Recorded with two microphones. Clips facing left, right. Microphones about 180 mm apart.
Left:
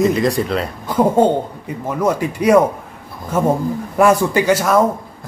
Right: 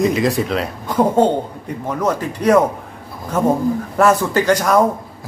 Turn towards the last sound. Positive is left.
turn(degrees=5)  # may be behind; listen again after turning